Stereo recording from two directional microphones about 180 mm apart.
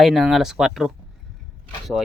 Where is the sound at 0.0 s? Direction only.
Centre (ahead or behind).